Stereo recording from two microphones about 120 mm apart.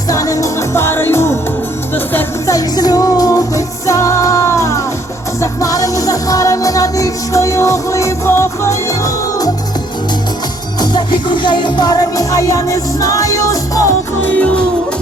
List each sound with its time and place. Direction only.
0.1 s music: 30° left (ahead or behind)
2.5 s music: 30° left (ahead or behind)
10.8 s music: 35° left (ahead or behind)
14.2 s music: 15° left (ahead or behind)